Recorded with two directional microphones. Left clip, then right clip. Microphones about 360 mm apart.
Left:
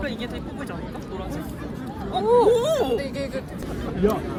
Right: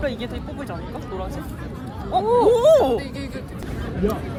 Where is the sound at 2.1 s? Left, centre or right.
Centre.